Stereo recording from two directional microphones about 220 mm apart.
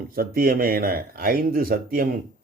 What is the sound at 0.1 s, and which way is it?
Speech, 40° right (ahead or behind).